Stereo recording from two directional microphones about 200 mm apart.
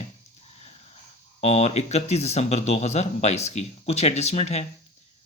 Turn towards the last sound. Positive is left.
turn(degrees=35)  # may be behind; listen again after turning